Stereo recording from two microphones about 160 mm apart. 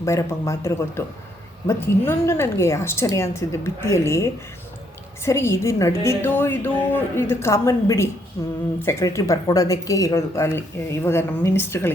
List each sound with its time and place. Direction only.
0.0 s a woman's voice: 20° left (ahead or behind)